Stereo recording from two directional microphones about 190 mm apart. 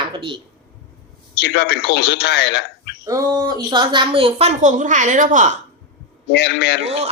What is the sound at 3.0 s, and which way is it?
A woman's voice, 20° right (ahead or behind).